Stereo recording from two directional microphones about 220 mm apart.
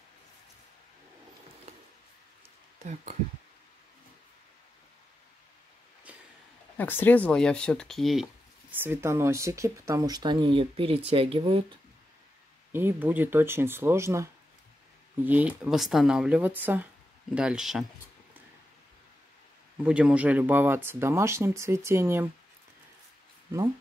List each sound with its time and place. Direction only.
2.8 s speech: 30° right (ahead or behind)
6.1 s a sound: 5° right (ahead or behind)
6.8 s speech: 10° left (ahead or behind); by 11.6 s 25° right (ahead or behind)
12.7 s speech: 10° right (ahead or behind)
19.8 s speech: 5° right (ahead or behind)